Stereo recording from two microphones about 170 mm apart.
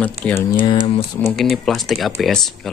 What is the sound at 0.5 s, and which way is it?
Speech, 30° left (ahead or behind).